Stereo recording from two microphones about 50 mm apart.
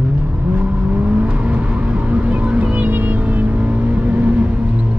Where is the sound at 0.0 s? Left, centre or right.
Right.